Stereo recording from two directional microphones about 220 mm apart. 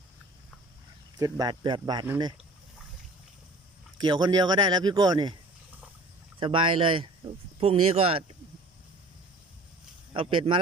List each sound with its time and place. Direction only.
1.2 s speech: 20° right (ahead or behind)
4.0 s speech: 20° right (ahead or behind)
6.4 s speech: 25° right (ahead or behind)
10.1 s speech: 25° right (ahead or behind)